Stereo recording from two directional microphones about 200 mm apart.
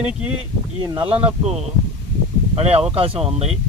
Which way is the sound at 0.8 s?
25° right (ahead or behind).